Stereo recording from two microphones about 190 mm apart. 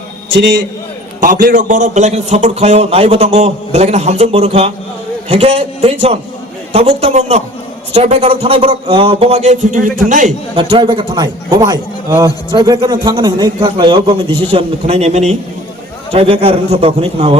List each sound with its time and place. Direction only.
1.2 s a man's voice: 50° right (ahead or behind)
10.5 s a man's voice: 30° right (ahead or behind)